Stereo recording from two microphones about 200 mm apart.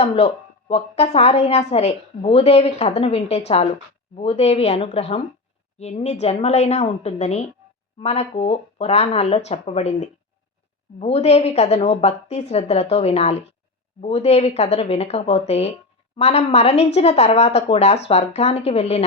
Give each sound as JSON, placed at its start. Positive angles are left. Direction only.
{"t": 0.0, "sound": "a woman's voice", "side_deg": 30}